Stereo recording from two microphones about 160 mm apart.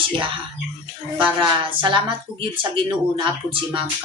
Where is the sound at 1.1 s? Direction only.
30° right (ahead or behind).